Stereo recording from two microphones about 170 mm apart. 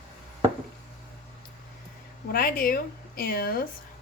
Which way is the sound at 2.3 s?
60° left (ahead or behind).